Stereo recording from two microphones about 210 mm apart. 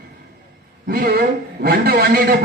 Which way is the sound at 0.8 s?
45° right (ahead or behind).